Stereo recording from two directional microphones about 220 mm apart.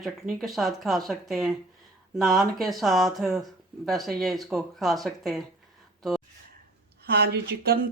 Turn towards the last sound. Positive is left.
turn(degrees=-45)  # may be behind; listen again after turning